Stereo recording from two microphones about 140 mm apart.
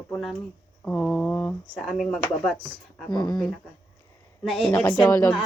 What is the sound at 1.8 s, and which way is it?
Speech, centre (ahead or behind).